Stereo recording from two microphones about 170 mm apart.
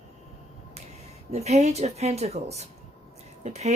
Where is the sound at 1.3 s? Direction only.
40° right (ahead or behind).